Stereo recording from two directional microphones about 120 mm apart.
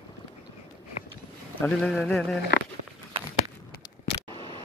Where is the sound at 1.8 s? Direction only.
5° left (ahead or behind).